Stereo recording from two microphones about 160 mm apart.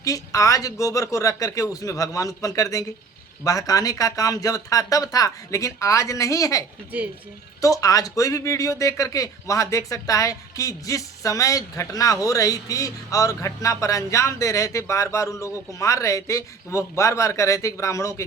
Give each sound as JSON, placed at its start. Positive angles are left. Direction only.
{"t": 0.0, "sound": "speech", "side_deg": 20}